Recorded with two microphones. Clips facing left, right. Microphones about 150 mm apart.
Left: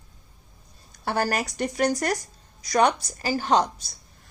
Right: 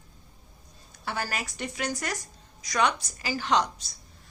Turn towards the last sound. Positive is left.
turn(degrees=40)  # may be behind; listen again after turning